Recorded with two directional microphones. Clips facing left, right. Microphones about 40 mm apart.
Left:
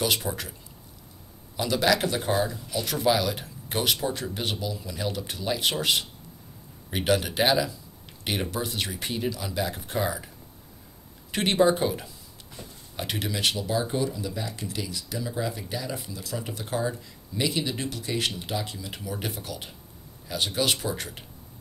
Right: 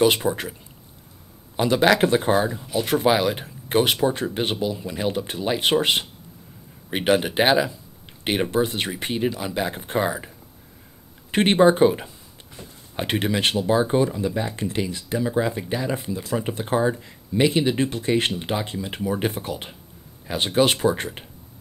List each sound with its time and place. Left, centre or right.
0.0 s speech: right
1.6 s speech: right
11.3 s speech: right